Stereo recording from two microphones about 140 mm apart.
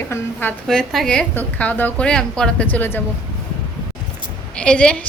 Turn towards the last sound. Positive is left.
turn(degrees=5)  # may be behind; listen again after turning